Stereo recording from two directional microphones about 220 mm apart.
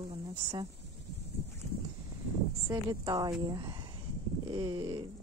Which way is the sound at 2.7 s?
15° right (ahead or behind).